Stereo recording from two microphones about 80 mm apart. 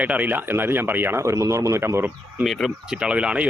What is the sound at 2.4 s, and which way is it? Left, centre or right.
Speech, centre.